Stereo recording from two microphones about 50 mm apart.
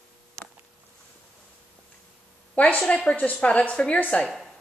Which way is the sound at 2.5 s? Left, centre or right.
Left.